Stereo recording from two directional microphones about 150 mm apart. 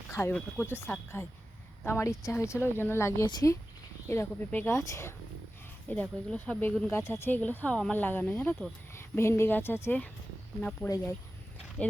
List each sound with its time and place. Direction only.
0.1 s speech: 15° left (ahead or behind)